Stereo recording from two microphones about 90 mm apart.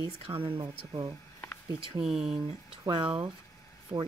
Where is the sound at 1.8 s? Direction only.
75° right (ahead or behind).